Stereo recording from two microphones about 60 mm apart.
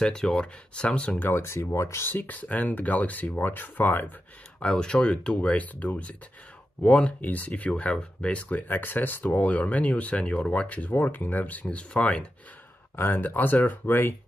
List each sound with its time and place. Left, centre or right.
0.0 s speech: centre
1.2 s speech: left
2.0 s speech: left
4.6 s speech: centre
12.9 s speech: left